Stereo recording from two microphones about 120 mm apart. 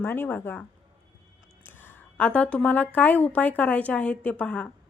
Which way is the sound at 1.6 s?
15° left (ahead or behind).